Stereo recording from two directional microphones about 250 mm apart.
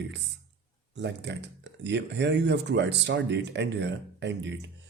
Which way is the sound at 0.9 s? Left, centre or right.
Right.